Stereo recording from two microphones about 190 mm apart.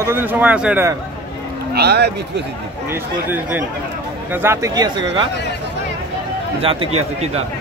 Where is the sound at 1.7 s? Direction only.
60° right (ahead or behind).